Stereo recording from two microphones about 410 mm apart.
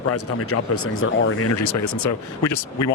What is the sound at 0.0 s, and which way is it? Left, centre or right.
Speech, left.